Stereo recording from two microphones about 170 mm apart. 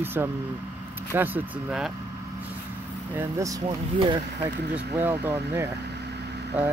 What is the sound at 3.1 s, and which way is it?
Speech, 20° right (ahead or behind).